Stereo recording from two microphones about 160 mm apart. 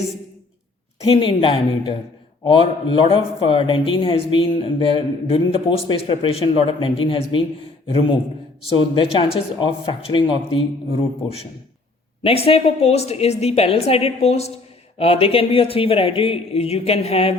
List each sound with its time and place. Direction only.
1.0 s speech: 35° left (ahead or behind)